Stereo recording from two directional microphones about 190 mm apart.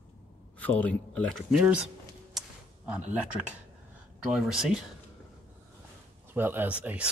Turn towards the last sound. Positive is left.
turn(degrees=-5)  # may be behind; listen again after turning